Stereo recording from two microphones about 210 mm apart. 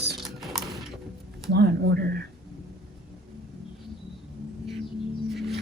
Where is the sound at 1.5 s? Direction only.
50° right (ahead or behind).